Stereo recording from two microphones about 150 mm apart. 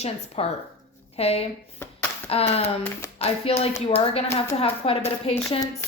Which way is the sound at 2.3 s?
40° left (ahead or behind).